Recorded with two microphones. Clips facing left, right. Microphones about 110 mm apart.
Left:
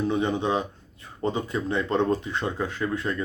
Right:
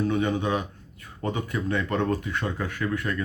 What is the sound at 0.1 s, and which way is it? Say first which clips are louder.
Speech: left 1 dB; 25° left (ahead or behind).